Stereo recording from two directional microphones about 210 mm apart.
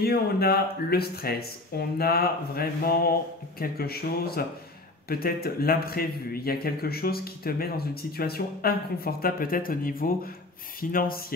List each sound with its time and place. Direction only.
0.0 s a man's voice: 50° left (ahead or behind)